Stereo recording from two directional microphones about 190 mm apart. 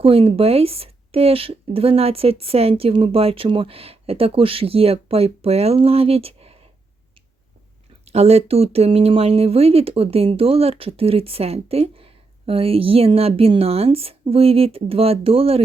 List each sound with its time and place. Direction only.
0.0 s speech: 30° right (ahead or behind)
8.0 s speech: 35° right (ahead or behind)